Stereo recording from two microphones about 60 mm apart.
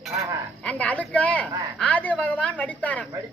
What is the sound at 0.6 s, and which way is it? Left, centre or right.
A woman's voice, left.